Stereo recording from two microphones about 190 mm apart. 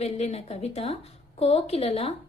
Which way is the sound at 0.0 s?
35° left (ahead or behind).